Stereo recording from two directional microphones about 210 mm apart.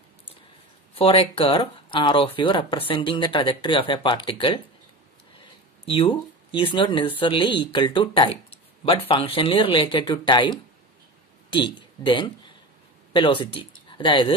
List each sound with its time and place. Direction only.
0.9 s speech: 25° left (ahead or behind)
11.5 s speech: 25° left (ahead or behind)